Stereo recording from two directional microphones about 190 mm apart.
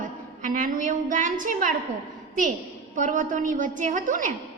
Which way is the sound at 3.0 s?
45° right (ahead or behind).